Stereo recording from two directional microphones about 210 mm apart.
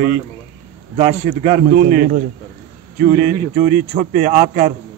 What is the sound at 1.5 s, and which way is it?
A man's voice, 45° right (ahead or behind).